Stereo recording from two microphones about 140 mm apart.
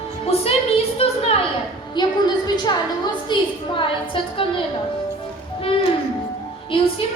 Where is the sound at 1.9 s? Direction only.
30° left (ahead or behind).